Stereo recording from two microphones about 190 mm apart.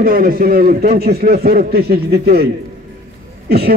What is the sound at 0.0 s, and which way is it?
A man's voice, 50° right (ahead or behind).